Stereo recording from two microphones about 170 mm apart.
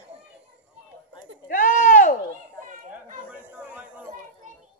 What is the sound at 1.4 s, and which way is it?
Sheep, 50° left (ahead or behind).